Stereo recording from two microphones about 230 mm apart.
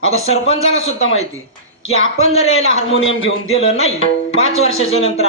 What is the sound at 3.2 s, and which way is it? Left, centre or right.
Speech, left.